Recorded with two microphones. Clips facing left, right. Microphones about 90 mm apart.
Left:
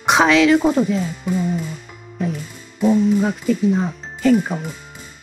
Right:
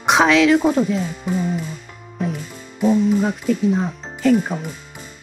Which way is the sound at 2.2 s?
Centre (ahead or behind).